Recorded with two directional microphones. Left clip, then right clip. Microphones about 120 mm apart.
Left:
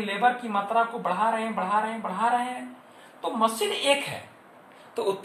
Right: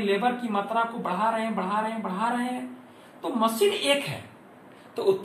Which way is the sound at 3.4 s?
30° left (ahead or behind).